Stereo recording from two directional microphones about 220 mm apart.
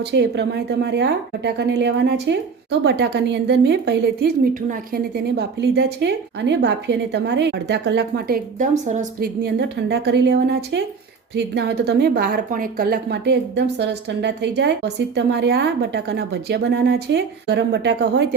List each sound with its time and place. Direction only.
0.1 s speech: 50° right (ahead or behind)
8.5 s speech: 35° right (ahead or behind); by 18.3 s 50° right (ahead or behind)